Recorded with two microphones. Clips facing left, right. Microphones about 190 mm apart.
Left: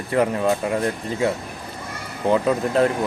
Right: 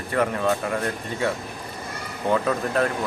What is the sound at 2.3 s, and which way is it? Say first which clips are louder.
Speech: left 3 dB; 20° left (ahead or behind).